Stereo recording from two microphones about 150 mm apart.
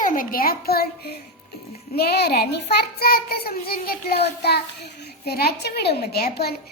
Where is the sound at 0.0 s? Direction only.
65° left (ahead or behind); by 4.2 s 85° left.